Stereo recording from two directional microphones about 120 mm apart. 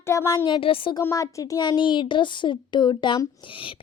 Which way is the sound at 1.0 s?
25° left (ahead or behind).